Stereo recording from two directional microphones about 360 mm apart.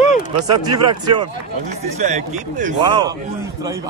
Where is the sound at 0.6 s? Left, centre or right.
Centre.